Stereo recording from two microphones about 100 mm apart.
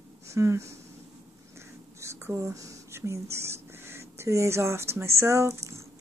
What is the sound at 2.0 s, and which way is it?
Speech, 30° right (ahead or behind).